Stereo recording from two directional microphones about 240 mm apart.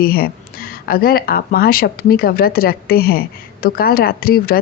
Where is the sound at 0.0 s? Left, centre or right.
Left.